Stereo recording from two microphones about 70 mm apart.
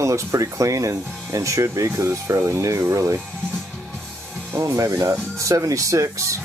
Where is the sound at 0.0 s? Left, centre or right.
Right.